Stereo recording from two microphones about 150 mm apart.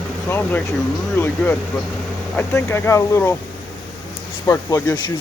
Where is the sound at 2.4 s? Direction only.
15° left (ahead or behind).